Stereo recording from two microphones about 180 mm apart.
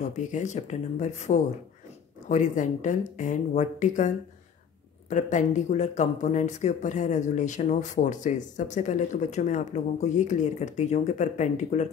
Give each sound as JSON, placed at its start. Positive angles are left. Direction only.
{"t": 0.0, "sound": "speech", "side_deg": 45}
{"t": 5.1, "sound": "speech", "side_deg": 45}